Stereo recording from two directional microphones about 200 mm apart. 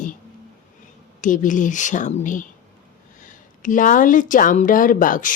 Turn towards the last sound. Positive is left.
turn(degrees=40)  # may be behind; listen again after turning